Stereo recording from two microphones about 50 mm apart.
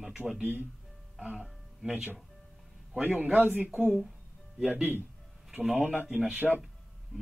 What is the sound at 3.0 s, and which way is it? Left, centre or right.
Speech, right.